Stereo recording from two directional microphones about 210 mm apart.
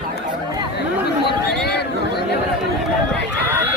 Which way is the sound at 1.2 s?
50° left (ahead or behind).